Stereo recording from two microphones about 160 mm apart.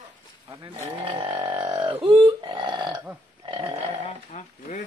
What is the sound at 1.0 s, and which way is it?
Grunt, 35° right (ahead or behind).